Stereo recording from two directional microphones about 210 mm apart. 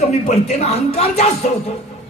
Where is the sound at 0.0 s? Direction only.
30° left (ahead or behind).